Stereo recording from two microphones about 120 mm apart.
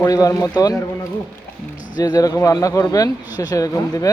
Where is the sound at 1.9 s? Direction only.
30° left (ahead or behind).